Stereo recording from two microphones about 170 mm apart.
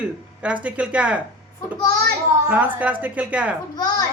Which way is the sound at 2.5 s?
10° right (ahead or behind).